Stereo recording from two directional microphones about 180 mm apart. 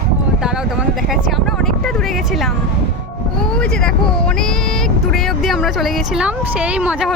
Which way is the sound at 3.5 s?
5° left (ahead or behind).